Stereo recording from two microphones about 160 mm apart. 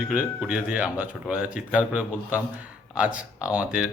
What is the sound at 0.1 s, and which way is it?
Speech, 10° right (ahead or behind).